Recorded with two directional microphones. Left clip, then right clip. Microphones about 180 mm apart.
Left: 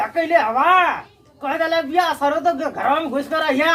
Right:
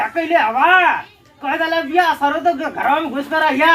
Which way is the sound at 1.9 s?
20° left (ahead or behind).